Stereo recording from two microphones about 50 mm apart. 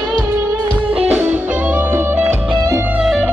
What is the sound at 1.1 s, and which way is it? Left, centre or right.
Music, right.